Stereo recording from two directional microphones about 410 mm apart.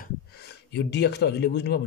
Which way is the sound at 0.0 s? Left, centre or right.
Left.